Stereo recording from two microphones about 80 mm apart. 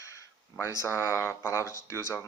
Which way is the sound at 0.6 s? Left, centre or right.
Left.